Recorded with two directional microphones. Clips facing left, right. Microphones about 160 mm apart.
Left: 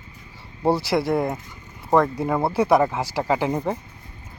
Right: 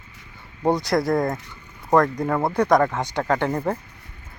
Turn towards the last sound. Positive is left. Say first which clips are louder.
# even
turn(degrees=10)  # may be behind; listen again after turning